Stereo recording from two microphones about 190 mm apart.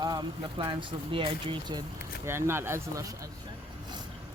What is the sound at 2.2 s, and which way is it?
Speech, 15° right (ahead or behind).